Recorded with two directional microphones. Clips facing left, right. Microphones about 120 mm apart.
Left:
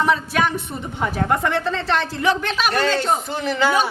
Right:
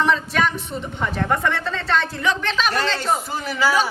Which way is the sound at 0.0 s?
10° left (ahead or behind).